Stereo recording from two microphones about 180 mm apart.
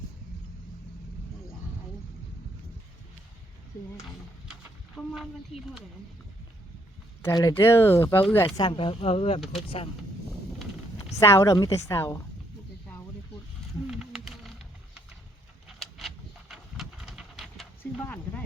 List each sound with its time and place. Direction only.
5.0 s speech: centre (ahead or behind)
7.2 s speech: 15° left (ahead or behind)
8.5 s speech: 25° left (ahead or behind)
10.9 s speech: 15° left (ahead or behind)
13.8 s a sound: 5° right (ahead or behind)
15.8 s a sound: centre (ahead or behind)